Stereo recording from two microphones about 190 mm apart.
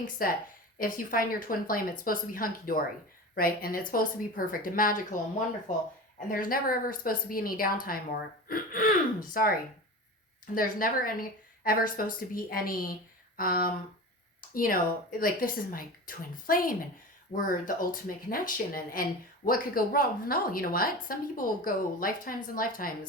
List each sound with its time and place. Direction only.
0.0 s speech: 50° left (ahead or behind)
6.1 s speech: 45° left (ahead or behind)